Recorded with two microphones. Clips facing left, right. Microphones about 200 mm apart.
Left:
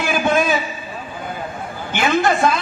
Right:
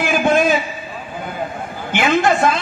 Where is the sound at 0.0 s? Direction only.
50° right (ahead or behind).